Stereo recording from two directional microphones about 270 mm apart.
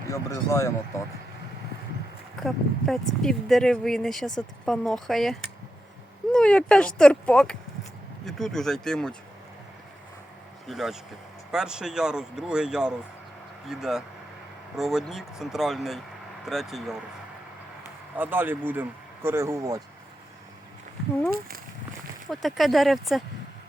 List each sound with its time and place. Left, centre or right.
0.1 s speech: centre
2.4 s speech: centre
10.7 s speech: centre
18.2 s speech: centre
21.3 s speech: right
22.3 s speech: centre